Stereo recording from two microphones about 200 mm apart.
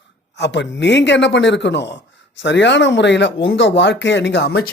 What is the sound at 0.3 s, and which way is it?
Speech, 60° left (ahead or behind).